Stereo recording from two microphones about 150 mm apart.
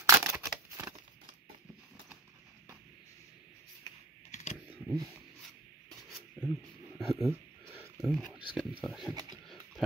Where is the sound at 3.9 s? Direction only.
30° left (ahead or behind).